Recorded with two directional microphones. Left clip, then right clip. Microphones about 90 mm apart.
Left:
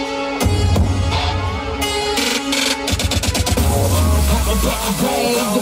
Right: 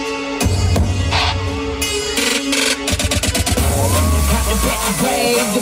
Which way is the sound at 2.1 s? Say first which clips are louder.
Right 1 dB; 45° left (ahead or behind).